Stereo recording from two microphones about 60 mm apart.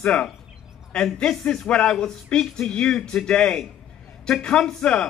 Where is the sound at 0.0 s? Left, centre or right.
Centre.